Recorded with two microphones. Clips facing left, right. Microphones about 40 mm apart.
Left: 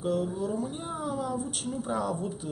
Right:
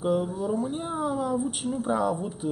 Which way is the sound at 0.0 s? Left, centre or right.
Centre.